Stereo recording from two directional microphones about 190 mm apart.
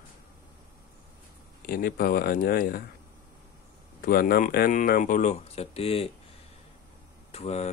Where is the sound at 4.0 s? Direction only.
50° left (ahead or behind); by 6.1 s 30° left (ahead or behind).